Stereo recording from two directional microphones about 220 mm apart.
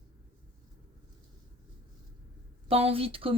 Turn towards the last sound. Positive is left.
turn(degrees=-25)  # may be behind; listen again after turning